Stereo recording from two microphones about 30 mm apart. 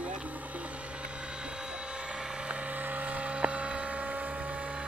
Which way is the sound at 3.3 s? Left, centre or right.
Right.